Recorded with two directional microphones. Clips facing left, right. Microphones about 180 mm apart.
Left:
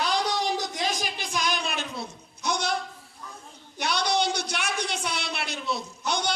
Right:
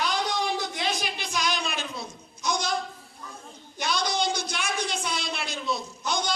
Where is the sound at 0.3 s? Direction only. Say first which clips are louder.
Left 1 dB; 40° left (ahead or behind); by 2.7 s 60° left (ahead or behind).